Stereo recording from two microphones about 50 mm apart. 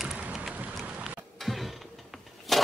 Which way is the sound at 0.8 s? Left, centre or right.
Right.